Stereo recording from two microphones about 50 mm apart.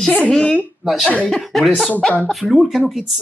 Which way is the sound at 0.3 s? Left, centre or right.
Centre.